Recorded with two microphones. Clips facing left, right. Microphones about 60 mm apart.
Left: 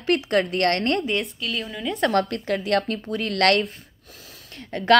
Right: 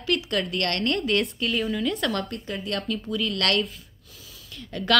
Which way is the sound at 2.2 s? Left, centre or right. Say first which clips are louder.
Left 7 dB; left.